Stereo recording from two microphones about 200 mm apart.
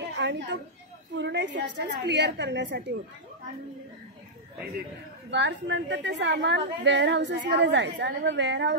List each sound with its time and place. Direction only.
0.1 s chatter: 60° right (ahead or behind)
1.1 s a woman's voice: 60° right (ahead or behind)
5.3 s a woman's voice: 60° right (ahead or behind)